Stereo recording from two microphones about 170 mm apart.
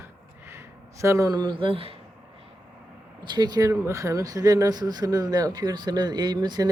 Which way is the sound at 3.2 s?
25° right (ahead or behind).